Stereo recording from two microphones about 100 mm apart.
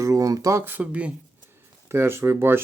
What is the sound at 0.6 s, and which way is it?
Speech, 15° right (ahead or behind).